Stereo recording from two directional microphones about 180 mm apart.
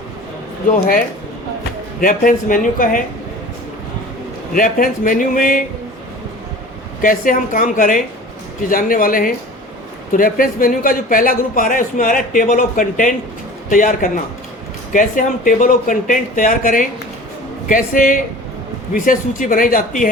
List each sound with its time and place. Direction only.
2.0 s a man's voice: 50° left (ahead or behind)
4.5 s a man's voice: 50° left (ahead or behind)
7.0 s a man's voice: 50° left (ahead or behind)
19.4 s a man's voice: 50° left (ahead or behind)